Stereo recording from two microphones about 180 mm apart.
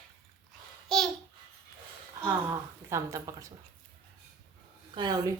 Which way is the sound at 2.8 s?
15° right (ahead or behind).